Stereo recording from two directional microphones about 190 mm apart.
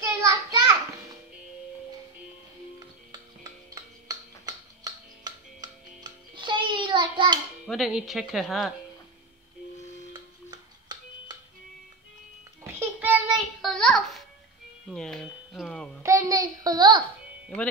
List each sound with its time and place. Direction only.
0.0 s a sound: 15° right (ahead or behind)
3.7 s music: 20° right (ahead or behind)
7.6 s speech: centre (ahead or behind)
10.1 s music: 20° right (ahead or behind)
12.7 s child singing: 10° right (ahead or behind)
13.7 s a sound: 5° left (ahead or behind)
14.9 s doorbell: 5° left (ahead or behind)
16.0 s babbling: 15° right (ahead or behind)